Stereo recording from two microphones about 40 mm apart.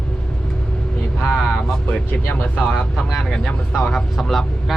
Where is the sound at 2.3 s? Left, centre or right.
Left.